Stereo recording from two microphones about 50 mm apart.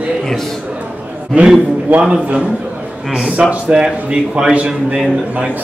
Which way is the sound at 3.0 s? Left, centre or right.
Centre.